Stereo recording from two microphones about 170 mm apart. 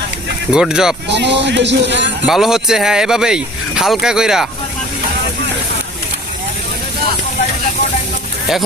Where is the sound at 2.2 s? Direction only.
5° right (ahead or behind).